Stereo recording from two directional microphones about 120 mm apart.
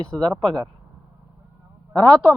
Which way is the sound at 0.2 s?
40° right (ahead or behind).